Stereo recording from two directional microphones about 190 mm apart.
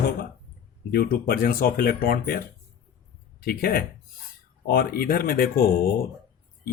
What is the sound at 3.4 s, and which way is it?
Speech, 50° left (ahead or behind).